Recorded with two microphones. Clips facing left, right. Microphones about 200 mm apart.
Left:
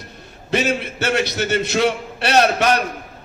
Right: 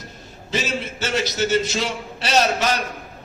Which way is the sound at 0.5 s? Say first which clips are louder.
Left 5 dB; 60° left (ahead or behind).